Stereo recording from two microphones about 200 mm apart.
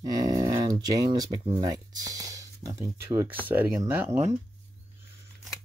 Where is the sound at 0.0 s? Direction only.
15° right (ahead or behind).